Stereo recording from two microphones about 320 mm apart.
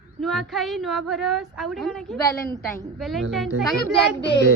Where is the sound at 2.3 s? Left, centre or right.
Left.